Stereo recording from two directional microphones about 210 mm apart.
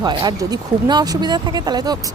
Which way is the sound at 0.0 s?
20° right (ahead or behind).